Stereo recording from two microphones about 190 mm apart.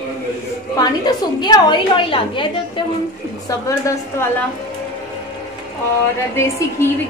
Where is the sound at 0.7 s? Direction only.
20° left (ahead or behind).